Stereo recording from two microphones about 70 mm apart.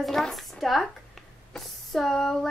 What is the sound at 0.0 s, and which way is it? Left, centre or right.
Speech, centre.